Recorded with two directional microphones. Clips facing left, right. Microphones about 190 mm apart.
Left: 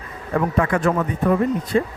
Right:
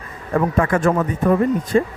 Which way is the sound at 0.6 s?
45° right (ahead or behind).